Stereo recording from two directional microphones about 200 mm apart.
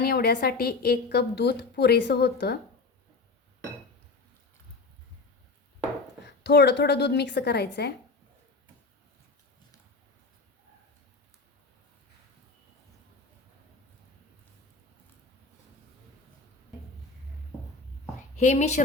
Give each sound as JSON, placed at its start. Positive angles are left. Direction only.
{"t": 0.0, "sound": "a woman's voice", "side_deg": 50}
{"t": 6.2, "sound": "a woman's voice", "side_deg": 55}
{"t": 18.3, "sound": "a woman's voice", "side_deg": 35}